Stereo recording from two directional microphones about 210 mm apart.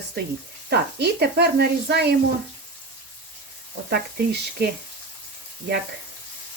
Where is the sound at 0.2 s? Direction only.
50° right (ahead or behind).